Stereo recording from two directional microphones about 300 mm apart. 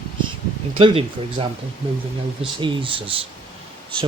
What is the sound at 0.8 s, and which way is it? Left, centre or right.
Speech, centre.